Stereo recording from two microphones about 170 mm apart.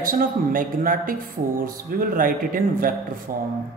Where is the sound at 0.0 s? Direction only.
55° right (ahead or behind).